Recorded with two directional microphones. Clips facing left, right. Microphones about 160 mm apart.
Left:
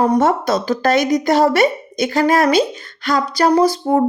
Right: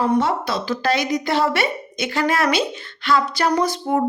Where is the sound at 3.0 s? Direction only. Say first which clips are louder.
Left 3 dB; 40° left (ahead or behind).